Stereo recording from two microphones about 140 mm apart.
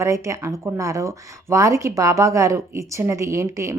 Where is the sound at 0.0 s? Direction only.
20° right (ahead or behind).